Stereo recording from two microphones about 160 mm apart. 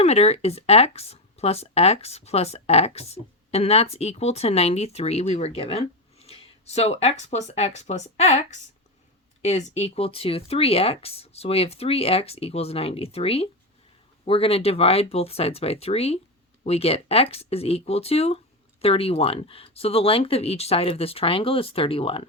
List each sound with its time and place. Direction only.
0.0 s speech: 40° left (ahead or behind)
9.4 s speech: 45° left (ahead or behind)